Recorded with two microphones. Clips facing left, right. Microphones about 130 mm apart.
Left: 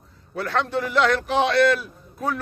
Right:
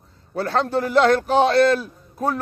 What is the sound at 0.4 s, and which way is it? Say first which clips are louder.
A man's voice: right 3 dB; 35° right (ahead or behind).